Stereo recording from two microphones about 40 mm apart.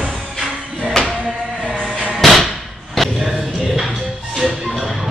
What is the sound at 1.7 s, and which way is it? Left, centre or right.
Music, left.